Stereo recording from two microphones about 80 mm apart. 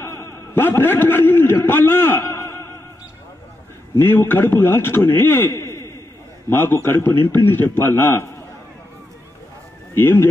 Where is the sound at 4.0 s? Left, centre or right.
Left.